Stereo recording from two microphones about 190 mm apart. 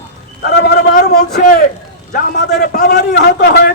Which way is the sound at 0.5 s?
60° left (ahead or behind).